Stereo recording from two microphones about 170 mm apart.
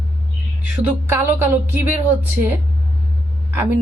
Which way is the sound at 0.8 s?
15° right (ahead or behind).